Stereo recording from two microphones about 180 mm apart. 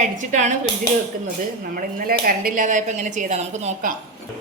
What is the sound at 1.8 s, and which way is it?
Speech, 50° right (ahead or behind).